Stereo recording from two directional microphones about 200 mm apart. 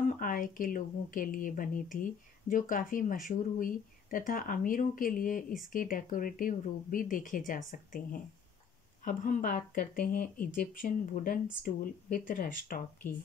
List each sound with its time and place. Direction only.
0.2 s a woman's voice: 45° left (ahead or behind)